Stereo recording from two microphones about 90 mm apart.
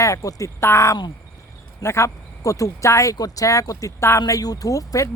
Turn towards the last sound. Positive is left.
turn(degrees=40)  # may be behind; listen again after turning